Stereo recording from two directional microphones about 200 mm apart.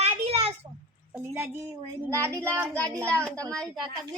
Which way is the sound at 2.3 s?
5° left (ahead or behind).